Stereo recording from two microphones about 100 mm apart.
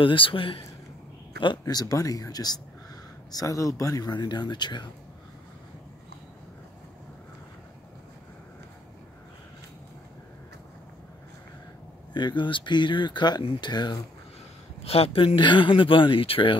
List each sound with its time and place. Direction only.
0.0 s speech: 60° left (ahead or behind)
1.6 s speech: 40° left (ahead or behind)
4.1 s speech: 45° left (ahead or behind)
12.1 s speech: 50° left (ahead or behind)
14.8 s speech: 80° left